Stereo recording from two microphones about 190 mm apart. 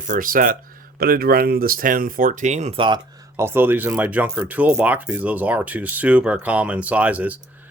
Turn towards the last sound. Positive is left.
turn(degrees=-10)  # may be behind; listen again after turning